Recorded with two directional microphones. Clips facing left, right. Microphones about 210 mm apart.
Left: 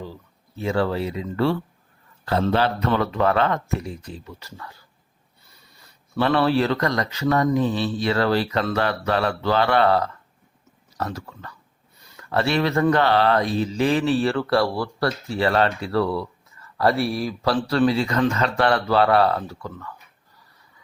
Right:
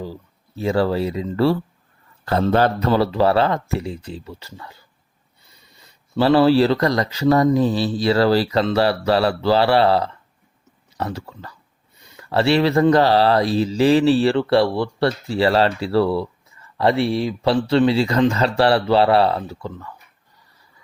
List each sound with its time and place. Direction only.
0.0 s speech: 35° right (ahead or behind)
2.2 s speech: 45° right (ahead or behind); by 4.7 s 25° right (ahead or behind)
6.1 s speech: 30° right (ahead or behind)